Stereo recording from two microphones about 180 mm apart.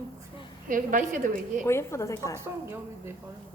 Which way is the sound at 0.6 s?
45° right (ahead or behind).